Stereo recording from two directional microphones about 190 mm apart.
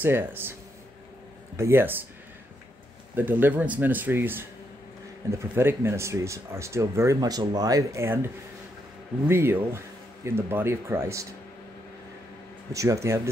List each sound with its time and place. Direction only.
0.0 s speech: 10° right (ahead or behind)
1.6 s speech: 10° right (ahead or behind)
3.2 s speech: 10° right (ahead or behind)
9.3 s speech: 10° right (ahead or behind)
12.7 s speech: 15° right (ahead or behind)